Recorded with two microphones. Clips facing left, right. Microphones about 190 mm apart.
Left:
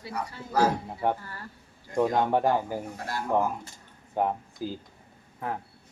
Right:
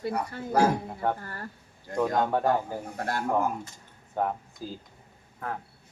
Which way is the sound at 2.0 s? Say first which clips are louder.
Left 2 dB; 10° left (ahead or behind).